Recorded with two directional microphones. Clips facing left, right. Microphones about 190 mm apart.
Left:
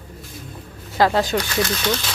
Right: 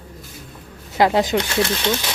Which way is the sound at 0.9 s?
20° right (ahead or behind).